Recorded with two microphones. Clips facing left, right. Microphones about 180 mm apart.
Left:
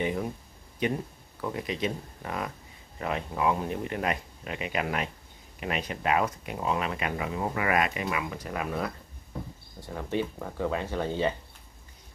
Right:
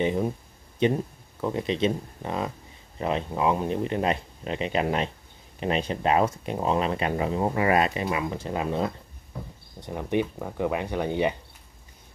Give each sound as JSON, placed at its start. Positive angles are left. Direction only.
{"t": 0.0, "sound": "speech", "side_deg": -25}